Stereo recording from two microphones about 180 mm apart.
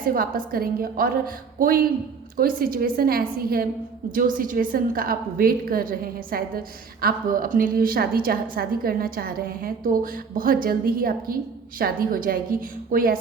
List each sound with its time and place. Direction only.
0.0 s a woman's voice: 50° right (ahead or behind)